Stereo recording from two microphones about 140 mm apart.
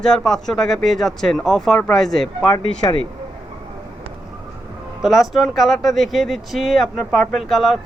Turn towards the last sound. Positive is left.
turn(degrees=0)  # may be behind; listen again after turning